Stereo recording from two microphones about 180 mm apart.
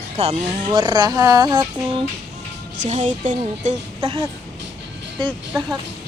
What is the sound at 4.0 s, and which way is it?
Speech, 25° right (ahead or behind).